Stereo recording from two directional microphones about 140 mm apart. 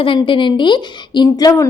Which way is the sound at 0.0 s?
35° left (ahead or behind).